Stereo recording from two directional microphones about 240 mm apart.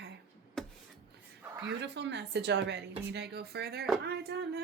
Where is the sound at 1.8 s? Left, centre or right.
Right.